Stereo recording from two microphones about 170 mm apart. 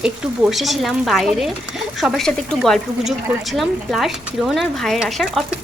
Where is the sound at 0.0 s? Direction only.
5° right (ahead or behind).